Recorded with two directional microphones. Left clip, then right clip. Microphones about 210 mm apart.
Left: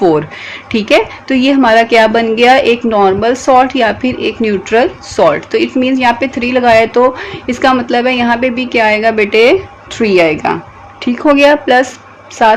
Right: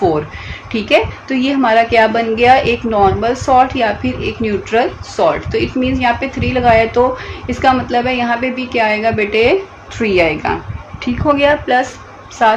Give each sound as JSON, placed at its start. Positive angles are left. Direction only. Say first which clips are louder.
{"t": 0.7, "sound": "a woman's voice", "louder": "left 3 dB", "side_deg": 55}